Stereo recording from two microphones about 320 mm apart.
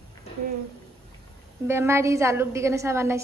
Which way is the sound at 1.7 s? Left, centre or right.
Centre.